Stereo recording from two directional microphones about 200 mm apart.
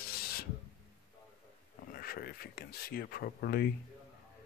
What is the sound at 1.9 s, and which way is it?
Speech, 50° left (ahead or behind).